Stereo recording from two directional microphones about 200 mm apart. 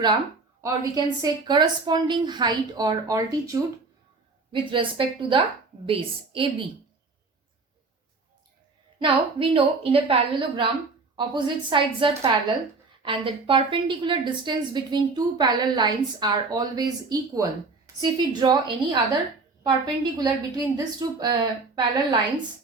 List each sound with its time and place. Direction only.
0.6 s a woman's voice: 15° right (ahead or behind)
9.0 s a woman's voice: 25° right (ahead or behind)